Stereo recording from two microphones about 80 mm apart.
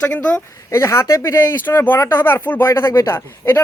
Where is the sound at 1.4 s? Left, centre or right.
Left.